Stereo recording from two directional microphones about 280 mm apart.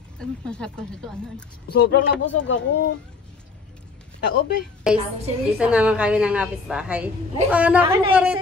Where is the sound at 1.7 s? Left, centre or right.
Left.